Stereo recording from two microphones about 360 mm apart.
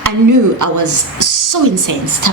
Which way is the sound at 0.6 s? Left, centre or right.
Right.